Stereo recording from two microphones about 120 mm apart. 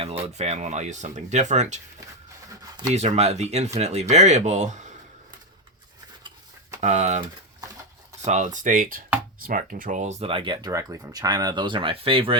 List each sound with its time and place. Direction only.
0.0 s speech: 55° right (ahead or behind); by 1.8 s 75° right (ahead or behind)
2.9 s speech: 65° right (ahead or behind); by 4.9 s 85° right
6.8 s speech: 70° right (ahead or behind)
8.2 s speech: 80° right; by 12.4 s 50° right (ahead or behind)